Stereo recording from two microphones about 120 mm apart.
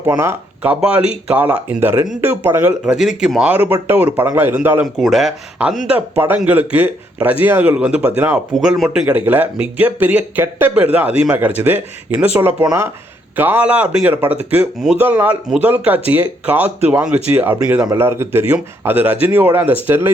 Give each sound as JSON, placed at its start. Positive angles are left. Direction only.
{"t": 0.0, "sound": "speech", "side_deg": -20}
{"t": 2.8, "sound": "speech", "side_deg": -5}
{"t": 3.5, "sound": "speech", "side_deg": -20}
{"t": 4.8, "sound": "speech", "side_deg": 0}
{"t": 5.9, "sound": "speech", "side_deg": -15}
{"t": 8.5, "sound": "speech", "side_deg": 0}